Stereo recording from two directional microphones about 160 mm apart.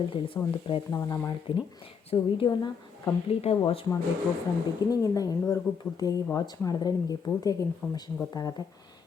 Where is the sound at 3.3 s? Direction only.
40° left (ahead or behind).